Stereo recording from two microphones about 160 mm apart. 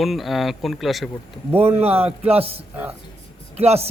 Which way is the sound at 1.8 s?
40° right (ahead or behind).